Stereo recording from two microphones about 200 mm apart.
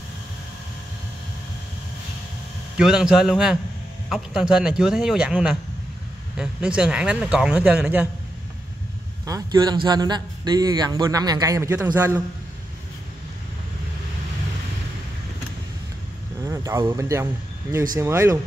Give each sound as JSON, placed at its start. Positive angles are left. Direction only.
{"t": 2.8, "sound": "speech", "side_deg": -5}
{"t": 9.2, "sound": "a man's voice", "side_deg": -20}
{"t": 16.4, "sound": "speech", "side_deg": -15}